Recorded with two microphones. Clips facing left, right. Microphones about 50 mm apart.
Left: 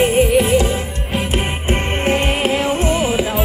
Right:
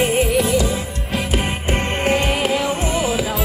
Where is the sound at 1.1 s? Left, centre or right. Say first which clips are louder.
Left 1 dB; centre.